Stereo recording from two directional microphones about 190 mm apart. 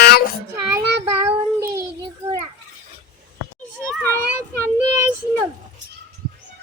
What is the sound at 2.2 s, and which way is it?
Children playing, 15° right (ahead or behind).